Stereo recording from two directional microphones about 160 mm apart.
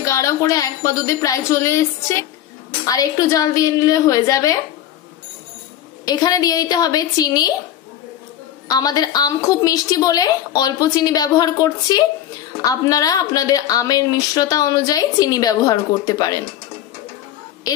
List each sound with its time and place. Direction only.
0.0 s a woman's voice: 20° left (ahead or behind)
6.0 s a woman's voice: 25° left (ahead or behind)
8.6 s a woman's voice: 25° left (ahead or behind)